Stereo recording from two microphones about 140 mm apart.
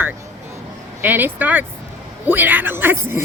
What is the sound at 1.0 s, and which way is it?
Speech, 15° right (ahead or behind).